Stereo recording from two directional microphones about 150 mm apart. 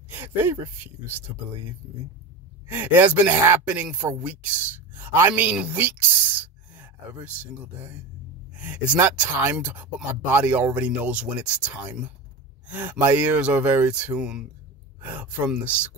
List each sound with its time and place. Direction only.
0.1 s speech: 15° right (ahead or behind)
2.7 s speech: 15° right (ahead or behind)